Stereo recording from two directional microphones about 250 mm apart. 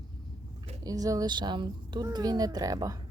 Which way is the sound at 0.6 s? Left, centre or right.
Centre.